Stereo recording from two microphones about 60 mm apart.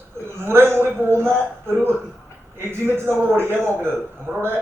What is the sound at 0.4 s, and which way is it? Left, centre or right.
A man's voice, right.